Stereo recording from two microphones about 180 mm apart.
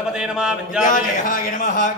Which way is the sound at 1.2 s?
50° left (ahead or behind).